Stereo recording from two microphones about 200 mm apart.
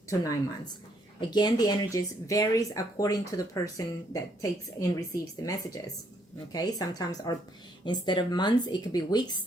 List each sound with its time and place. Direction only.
0.1 s speech: 15° left (ahead or behind)